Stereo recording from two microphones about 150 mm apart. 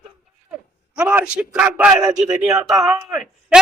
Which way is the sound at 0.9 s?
10° right (ahead or behind).